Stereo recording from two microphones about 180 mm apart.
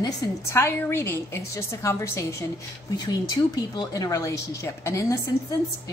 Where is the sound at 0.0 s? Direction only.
15° left (ahead or behind).